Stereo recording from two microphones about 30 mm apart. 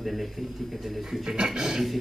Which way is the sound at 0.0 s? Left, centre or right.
Centre.